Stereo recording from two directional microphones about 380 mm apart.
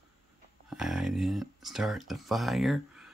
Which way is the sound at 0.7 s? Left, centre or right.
Centre.